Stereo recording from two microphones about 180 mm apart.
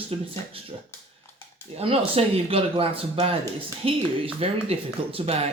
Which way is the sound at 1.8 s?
35° right (ahead or behind).